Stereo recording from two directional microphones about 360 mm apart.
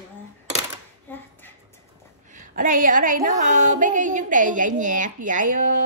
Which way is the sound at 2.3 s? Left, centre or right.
Right.